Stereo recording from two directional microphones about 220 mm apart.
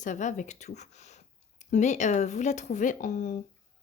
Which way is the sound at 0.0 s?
35° left (ahead or behind).